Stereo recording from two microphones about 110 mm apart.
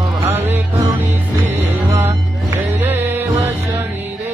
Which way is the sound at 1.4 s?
20° right (ahead or behind).